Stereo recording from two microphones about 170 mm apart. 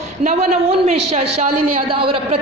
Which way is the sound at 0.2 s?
40° right (ahead or behind).